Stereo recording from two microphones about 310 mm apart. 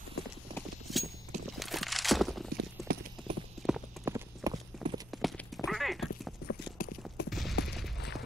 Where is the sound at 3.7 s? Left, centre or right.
Centre.